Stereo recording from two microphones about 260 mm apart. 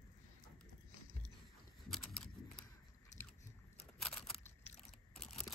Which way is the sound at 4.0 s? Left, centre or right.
Centre.